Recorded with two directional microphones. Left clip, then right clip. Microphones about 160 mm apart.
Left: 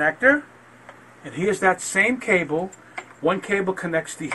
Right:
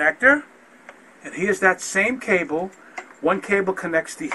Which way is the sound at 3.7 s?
10° left (ahead or behind).